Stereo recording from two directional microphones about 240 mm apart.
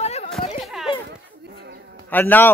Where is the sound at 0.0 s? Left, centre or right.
Left.